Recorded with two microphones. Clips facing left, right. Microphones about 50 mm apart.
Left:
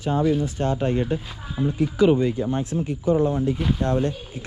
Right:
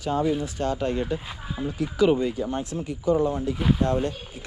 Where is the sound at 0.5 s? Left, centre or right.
Left.